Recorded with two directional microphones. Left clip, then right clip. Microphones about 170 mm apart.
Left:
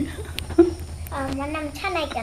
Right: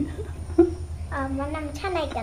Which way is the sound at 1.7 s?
25° right (ahead or behind).